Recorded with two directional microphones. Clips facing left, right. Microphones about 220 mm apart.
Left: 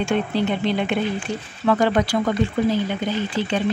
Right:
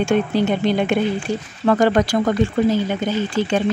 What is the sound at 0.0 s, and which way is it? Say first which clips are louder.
Speech: right 4 dB; 45° right (ahead or behind).